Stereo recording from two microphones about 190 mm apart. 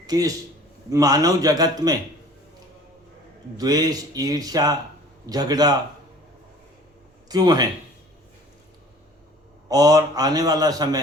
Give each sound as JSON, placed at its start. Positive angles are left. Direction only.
{"t": 0.1, "sound": "a man's voice", "side_deg": -20}
{"t": 3.6, "sound": "a man's voice", "side_deg": -20}
{"t": 7.3, "sound": "speech", "side_deg": -20}
{"t": 9.6, "sound": "a man's voice", "side_deg": -20}